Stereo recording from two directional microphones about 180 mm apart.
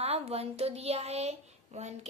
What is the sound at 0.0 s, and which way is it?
Speech, 35° right (ahead or behind).